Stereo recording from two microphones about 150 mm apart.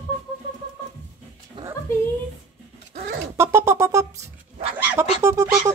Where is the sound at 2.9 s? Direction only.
70° right (ahead or behind).